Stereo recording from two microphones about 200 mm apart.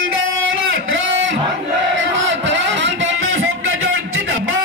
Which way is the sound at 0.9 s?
70° right (ahead or behind).